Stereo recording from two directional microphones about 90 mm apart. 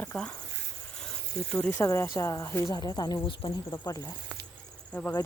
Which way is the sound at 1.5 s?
15° left (ahead or behind).